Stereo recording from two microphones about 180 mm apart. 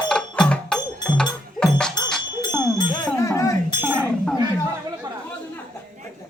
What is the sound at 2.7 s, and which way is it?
Music, 20° left (ahead or behind).